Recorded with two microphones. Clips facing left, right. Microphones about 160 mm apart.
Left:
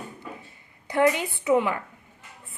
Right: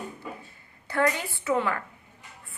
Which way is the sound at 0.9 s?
15° left (ahead or behind).